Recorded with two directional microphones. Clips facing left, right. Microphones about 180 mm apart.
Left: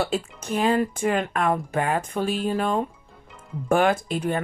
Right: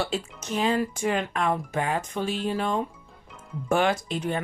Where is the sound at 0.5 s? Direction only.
55° left (ahead or behind).